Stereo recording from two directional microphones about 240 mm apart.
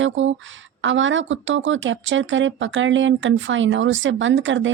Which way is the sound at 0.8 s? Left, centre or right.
Right.